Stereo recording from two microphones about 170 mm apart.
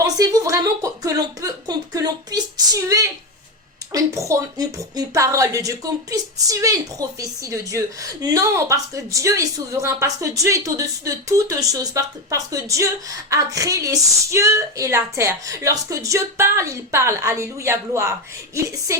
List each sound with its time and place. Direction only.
0.2 s a woman's voice: 20° right (ahead or behind)